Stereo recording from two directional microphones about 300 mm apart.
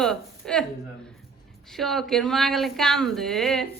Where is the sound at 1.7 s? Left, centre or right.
Centre.